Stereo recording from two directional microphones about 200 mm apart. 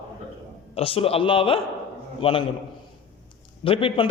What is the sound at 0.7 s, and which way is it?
A man's voice, 30° left (ahead or behind).